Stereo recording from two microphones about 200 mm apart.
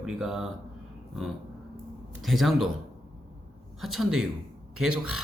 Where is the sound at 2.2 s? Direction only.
Centre (ahead or behind).